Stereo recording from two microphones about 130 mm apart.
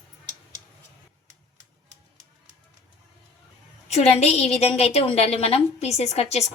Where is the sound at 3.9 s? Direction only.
55° left (ahead or behind).